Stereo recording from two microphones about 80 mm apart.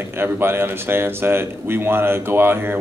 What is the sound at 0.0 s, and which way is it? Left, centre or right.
Speech, right.